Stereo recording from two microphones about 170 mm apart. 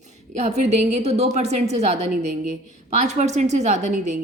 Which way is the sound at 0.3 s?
40° right (ahead or behind).